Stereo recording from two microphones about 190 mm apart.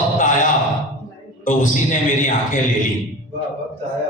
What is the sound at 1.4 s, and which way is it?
A man's voice, 45° left (ahead or behind).